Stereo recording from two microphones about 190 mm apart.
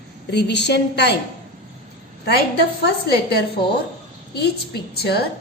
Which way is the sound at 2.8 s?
55° left (ahead or behind).